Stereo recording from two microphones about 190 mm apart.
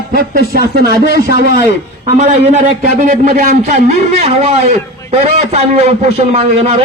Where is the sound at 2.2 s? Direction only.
35° right (ahead or behind).